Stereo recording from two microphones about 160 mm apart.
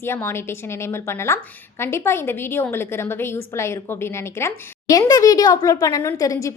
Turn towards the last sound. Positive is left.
turn(degrees=20)  # may be behind; listen again after turning